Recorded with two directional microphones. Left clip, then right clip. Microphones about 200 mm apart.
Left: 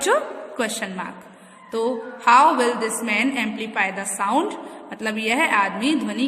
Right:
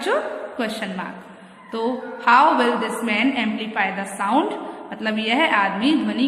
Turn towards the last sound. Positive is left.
turn(degrees=35)  # may be behind; listen again after turning